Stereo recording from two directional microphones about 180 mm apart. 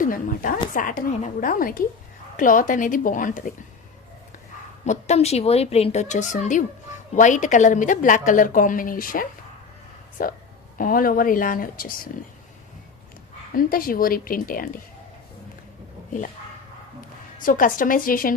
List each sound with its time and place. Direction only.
0.0 s a woman's voice: 50° left (ahead or behind)
4.9 s a woman's voice: 40° left (ahead or behind)
13.6 s a woman's voice: 55° left (ahead or behind)
17.4 s a woman's voice: 50° left (ahead or behind)